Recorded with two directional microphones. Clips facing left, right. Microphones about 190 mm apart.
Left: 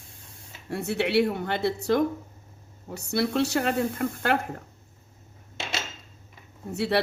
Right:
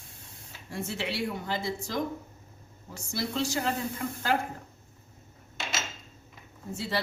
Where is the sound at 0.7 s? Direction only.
65° left (ahead or behind).